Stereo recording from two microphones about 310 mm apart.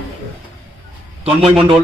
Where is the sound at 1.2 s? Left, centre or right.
Centre.